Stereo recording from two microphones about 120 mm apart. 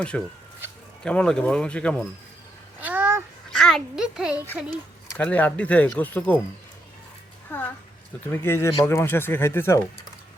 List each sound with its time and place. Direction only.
0.1 s speech: 5° left (ahead or behind)
2.8 s a sound: 15° right (ahead or behind)
3.5 s a child's voice: 5° left (ahead or behind)
5.1 s speech: 10° left (ahead or behind)
7.5 s a woman's voice: 15° left (ahead or behind)